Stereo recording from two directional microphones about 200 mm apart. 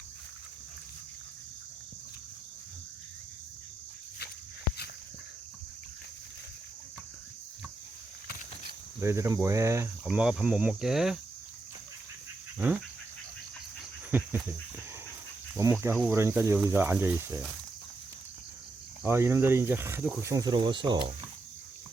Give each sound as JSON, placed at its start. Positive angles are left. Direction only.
{"t": 9.0, "sound": "speech", "side_deg": -15}
{"t": 12.5, "sound": "a sound", "side_deg": -10}
{"t": 14.1, "sound": "cricket", "side_deg": -10}
{"t": 15.5, "sound": "speech", "side_deg": -15}
{"t": 19.0, "sound": "speech", "side_deg": -10}
{"t": 20.2, "sound": "speech", "side_deg": -15}